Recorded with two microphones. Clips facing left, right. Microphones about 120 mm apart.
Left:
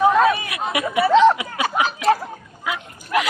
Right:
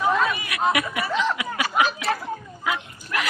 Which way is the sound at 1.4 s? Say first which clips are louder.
Left 1 dB; 20° left (ahead or behind).